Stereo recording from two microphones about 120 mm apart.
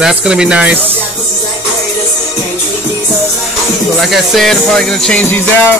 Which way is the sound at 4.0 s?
Centre (ahead or behind).